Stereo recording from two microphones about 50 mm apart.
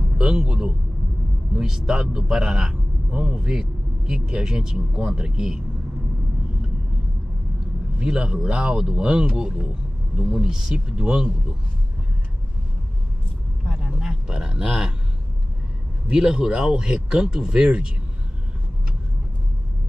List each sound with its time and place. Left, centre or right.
0.2 s a man's voice: centre
8.0 s a man's voice: centre
13.7 s a sound: centre
14.7 s a man's voice: centre
16.1 s a man's voice: centre